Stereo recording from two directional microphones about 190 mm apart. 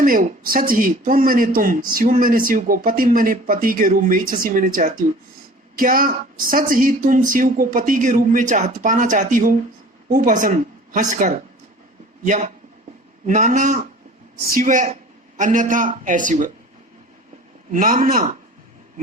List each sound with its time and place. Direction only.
0.0 s a woman's voice: 50° right (ahead or behind)
17.7 s a woman's voice: 45° right (ahead or behind)